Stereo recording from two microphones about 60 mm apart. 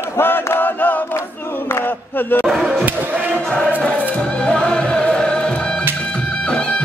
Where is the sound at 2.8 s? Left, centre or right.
Right.